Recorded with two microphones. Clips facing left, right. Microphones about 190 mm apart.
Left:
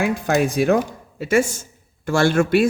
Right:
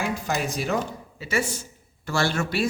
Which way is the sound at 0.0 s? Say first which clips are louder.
Left 8 dB; 55° left (ahead or behind).